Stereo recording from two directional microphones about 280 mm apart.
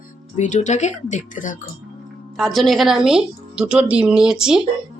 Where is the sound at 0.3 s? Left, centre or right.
Left.